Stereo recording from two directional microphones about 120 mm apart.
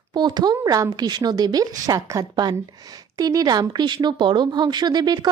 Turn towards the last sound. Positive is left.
turn(degrees=-35)  # may be behind; listen again after turning